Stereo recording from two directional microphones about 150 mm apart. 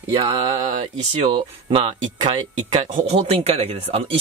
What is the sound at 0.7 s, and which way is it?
Speech, 40° right (ahead or behind).